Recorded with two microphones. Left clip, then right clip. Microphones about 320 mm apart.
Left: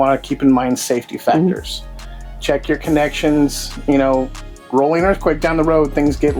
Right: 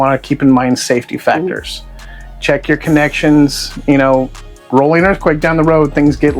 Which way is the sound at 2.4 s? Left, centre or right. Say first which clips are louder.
Right 4 dB; right.